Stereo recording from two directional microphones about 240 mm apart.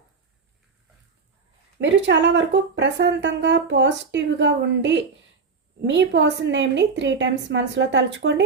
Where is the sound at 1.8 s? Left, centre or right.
Right.